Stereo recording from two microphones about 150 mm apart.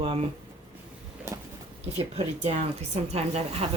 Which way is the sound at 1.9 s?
40° right (ahead or behind).